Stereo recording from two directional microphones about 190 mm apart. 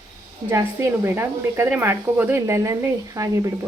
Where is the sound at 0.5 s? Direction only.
10° right (ahead or behind).